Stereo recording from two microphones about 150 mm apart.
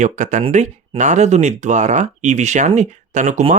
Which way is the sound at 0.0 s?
55° right (ahead or behind).